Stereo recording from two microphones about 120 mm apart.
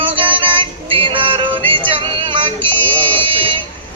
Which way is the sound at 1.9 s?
45° right (ahead or behind).